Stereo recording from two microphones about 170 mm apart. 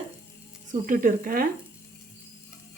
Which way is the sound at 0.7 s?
50° right (ahead or behind).